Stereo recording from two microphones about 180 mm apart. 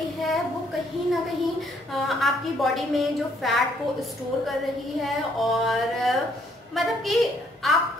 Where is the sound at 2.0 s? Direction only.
Centre (ahead or behind).